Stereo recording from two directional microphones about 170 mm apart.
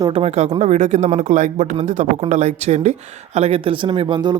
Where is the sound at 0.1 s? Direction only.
40° right (ahead or behind).